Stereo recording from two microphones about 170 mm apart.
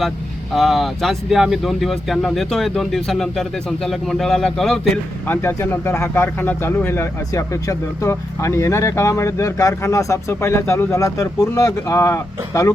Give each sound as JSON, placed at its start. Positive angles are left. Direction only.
{"t": 0.5, "sound": "speech", "side_deg": 0}